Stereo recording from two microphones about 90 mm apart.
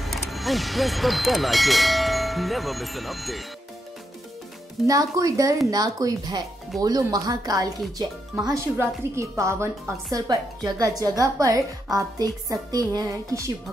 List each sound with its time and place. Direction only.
0.0 s speech: centre (ahead or behind)
4.8 s a woman's voice: 40° right (ahead or behind)
8.5 s a woman's voice: 35° right (ahead or behind)
10.1 s a woman's voice: 45° right (ahead or behind)